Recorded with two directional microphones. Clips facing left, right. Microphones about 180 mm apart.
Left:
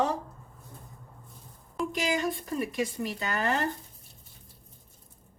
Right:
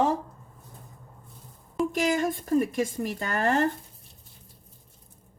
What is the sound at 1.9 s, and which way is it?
Speech, 50° right (ahead or behind).